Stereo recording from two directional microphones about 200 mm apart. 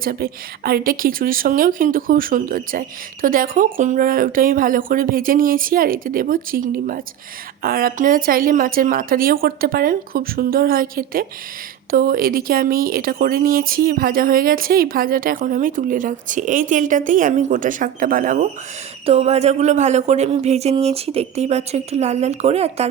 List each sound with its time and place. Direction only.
0.0 s speech: 50° right (ahead or behind)
19.0 s speech: 30° right (ahead or behind)